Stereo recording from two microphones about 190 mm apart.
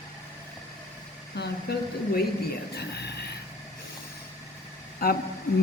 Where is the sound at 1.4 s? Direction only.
60° left (ahead or behind).